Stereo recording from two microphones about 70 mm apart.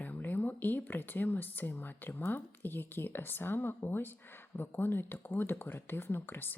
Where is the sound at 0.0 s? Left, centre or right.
Left.